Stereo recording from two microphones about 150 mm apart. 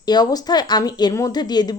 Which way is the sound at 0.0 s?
30° left (ahead or behind).